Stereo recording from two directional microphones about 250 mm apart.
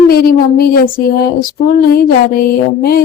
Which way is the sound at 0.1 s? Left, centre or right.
Left.